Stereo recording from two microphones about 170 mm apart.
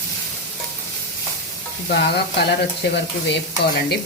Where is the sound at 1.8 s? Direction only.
80° left.